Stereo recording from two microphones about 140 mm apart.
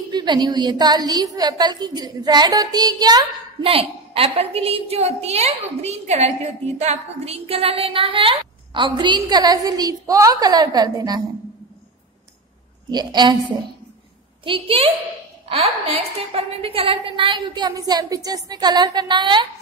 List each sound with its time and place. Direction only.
0.1 s a woman's voice: 30° right (ahead or behind)
3.6 s a woman's voice: 40° right (ahead or behind)
12.9 s a woman's voice: 30° right (ahead or behind)